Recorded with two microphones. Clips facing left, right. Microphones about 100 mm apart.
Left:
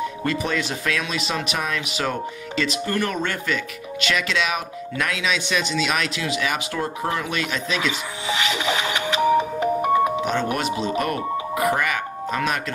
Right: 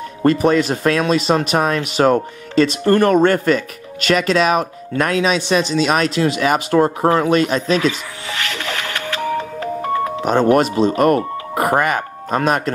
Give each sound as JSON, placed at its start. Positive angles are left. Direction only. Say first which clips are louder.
{"t": 0.2, "sound": "speech", "louder": "right 14 dB", "side_deg": -45}
{"t": 8.3, "sound": "music", "louder": "left 2 dB", "side_deg": 15}
{"t": 10.2, "sound": "speech", "louder": "right 9 dB", "side_deg": -40}